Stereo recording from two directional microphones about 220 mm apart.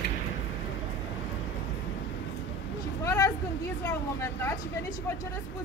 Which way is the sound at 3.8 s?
10° left (ahead or behind).